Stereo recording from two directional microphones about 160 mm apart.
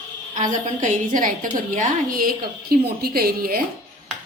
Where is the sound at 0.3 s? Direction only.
50° right (ahead or behind); by 3.6 s 65° right (ahead or behind).